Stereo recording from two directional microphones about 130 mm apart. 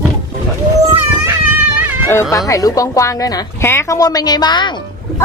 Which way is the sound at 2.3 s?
25° left (ahead or behind).